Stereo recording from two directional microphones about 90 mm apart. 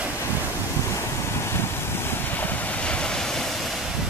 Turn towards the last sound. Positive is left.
turn(degrees=10)  # may be behind; listen again after turning